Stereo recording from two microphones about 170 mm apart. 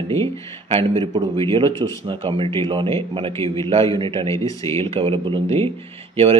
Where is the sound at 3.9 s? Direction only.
30° right (ahead or behind).